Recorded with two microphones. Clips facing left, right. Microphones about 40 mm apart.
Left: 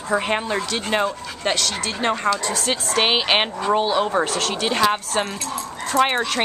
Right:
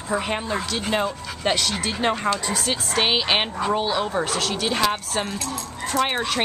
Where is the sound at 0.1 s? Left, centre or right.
Left.